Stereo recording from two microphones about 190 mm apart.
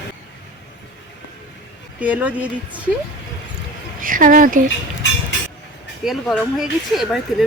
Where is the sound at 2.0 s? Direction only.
5° right (ahead or behind).